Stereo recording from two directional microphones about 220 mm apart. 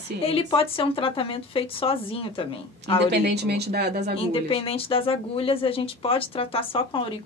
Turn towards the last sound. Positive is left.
turn(degrees=25)  # may be behind; listen again after turning